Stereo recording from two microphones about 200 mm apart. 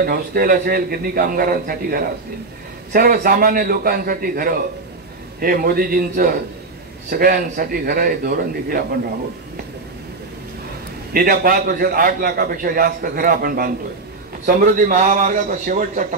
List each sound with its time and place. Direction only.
0.0 s a man's voice: 50° right (ahead or behind)
11.1 s a man's voice: 45° right (ahead or behind)